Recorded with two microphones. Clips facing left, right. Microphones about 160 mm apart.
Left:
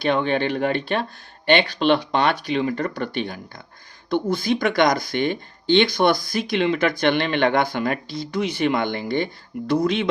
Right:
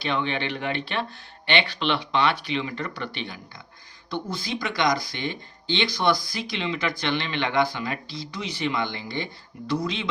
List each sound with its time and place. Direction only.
0.0 s speech: 50° left (ahead or behind)